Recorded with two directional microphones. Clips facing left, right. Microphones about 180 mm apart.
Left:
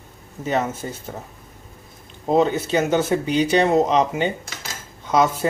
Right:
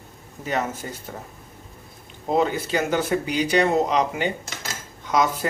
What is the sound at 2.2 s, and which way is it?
Speech, 25° left (ahead or behind).